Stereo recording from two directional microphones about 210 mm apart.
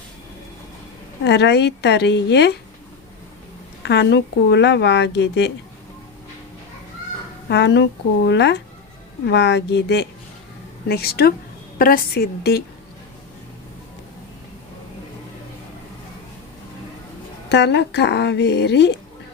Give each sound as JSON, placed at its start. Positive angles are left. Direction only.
{"t": 1.2, "sound": "speech", "side_deg": 55}
{"t": 3.8, "sound": "speech", "side_deg": 55}
{"t": 7.4, "sound": "speech", "side_deg": 55}
{"t": 17.5, "sound": "speech", "side_deg": 55}